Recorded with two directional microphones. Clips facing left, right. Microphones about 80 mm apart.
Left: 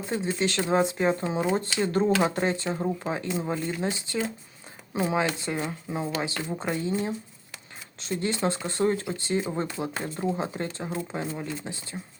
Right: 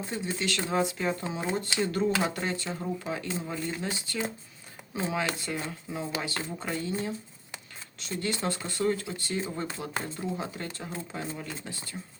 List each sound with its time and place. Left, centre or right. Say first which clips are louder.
0.1 s speech: left 6 dB; left